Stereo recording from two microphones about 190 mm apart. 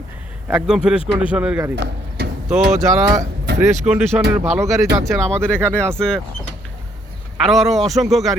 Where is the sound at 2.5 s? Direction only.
5° right (ahead or behind).